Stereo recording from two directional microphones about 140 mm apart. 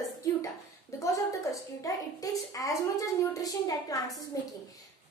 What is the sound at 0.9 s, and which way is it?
A woman's voice, 25° left (ahead or behind).